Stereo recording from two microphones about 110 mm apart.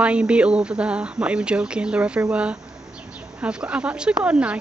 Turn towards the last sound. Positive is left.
turn(degrees=-10)  # may be behind; listen again after turning